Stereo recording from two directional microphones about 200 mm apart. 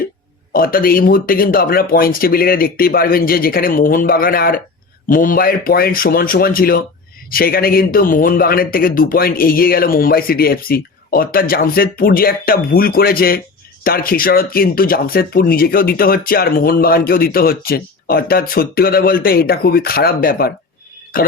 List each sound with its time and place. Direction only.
0.5 s speech: 45° left (ahead or behind)